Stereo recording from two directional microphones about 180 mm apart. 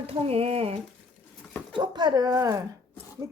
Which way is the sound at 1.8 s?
25° right (ahead or behind).